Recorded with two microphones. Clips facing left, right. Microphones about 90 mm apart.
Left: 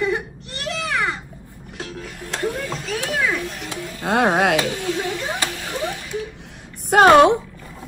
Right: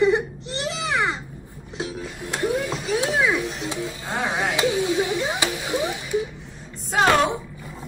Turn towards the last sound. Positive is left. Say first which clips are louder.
# left 8 dB
turn(degrees=60)  # may be behind; listen again after turning